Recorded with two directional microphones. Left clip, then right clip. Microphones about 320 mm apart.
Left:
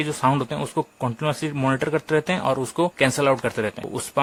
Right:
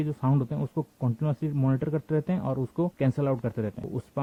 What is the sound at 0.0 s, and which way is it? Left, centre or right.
Speech, centre.